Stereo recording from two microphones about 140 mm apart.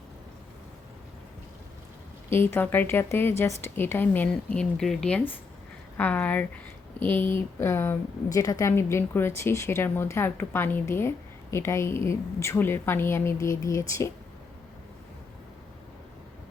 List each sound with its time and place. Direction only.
2.3 s a woman's voice: 15° left (ahead or behind)